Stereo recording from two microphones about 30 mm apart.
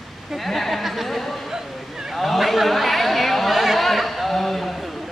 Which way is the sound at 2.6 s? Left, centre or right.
Centre.